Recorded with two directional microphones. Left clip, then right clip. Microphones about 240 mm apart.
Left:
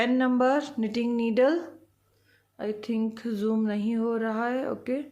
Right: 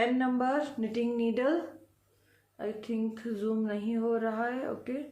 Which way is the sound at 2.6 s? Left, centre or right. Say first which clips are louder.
Left 4 dB; left.